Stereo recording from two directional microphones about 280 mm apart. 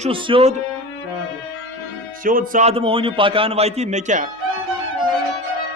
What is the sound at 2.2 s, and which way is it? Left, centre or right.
A man's voice, right.